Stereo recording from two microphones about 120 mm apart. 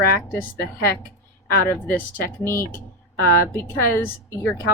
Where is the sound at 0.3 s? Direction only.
20° left (ahead or behind).